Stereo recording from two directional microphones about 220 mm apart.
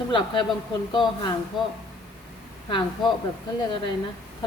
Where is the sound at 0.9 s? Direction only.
20° left (ahead or behind).